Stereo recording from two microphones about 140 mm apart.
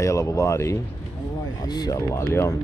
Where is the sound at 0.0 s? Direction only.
20° left (ahead or behind).